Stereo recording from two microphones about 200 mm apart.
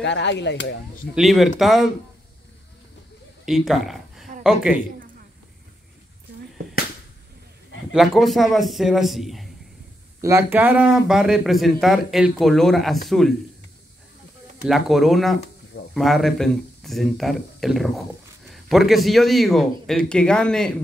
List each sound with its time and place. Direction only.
0.0 s speech: 60° left (ahead or behind)
1.1 s speech: centre (ahead or behind)
3.4 s a woman's voice: centre (ahead or behind)
7.9 s speech: centre (ahead or behind)
10.2 s speech: 10° right (ahead or behind)
14.7 s speech: centre (ahead or behind)